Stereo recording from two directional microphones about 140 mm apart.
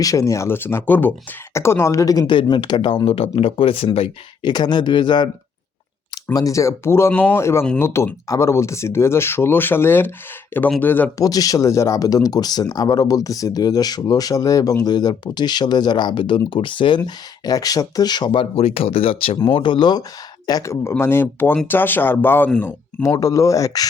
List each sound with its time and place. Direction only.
0.0 s speech: 25° left (ahead or behind)
6.3 s speech: 25° left (ahead or behind)
11.2 s speech: 25° left (ahead or behind)
17.0 s speech: 25° left (ahead or behind)